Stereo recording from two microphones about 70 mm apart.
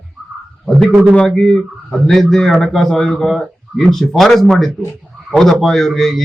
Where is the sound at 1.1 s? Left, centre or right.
Centre.